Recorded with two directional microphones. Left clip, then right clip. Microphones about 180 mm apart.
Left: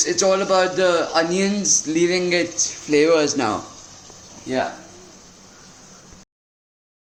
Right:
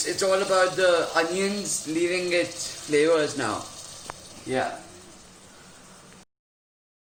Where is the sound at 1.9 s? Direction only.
55° left (ahead or behind).